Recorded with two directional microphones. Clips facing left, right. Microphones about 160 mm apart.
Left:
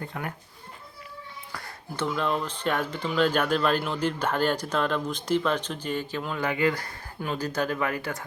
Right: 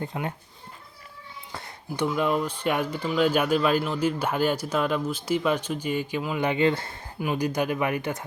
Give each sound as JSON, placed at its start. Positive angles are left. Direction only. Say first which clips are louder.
{"t": 0.0, "sound": "speech", "louder": "right 3 dB", "side_deg": -20}
{"t": 1.5, "sound": "a sound", "louder": "right 3 dB", "side_deg": -20}
{"t": 2.0, "sound": "speech", "louder": "right 3 dB", "side_deg": -10}
{"t": 7.2, "sound": "speech", "louder": "right 3 dB", "side_deg": -15}